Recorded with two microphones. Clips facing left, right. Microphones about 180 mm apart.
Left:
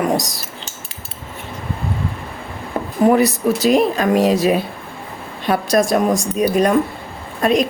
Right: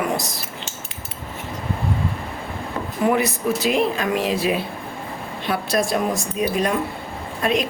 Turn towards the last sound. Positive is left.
turn(degrees=40)  # may be behind; listen again after turning